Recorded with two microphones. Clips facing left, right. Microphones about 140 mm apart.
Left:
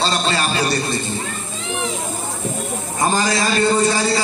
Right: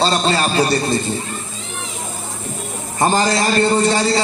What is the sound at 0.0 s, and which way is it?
Speech, 40° right (ahead or behind).